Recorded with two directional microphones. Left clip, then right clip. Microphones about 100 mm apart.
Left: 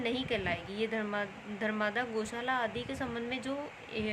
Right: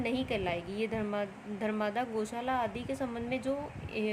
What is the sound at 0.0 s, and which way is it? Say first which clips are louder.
A woman's voice: even; 90° right.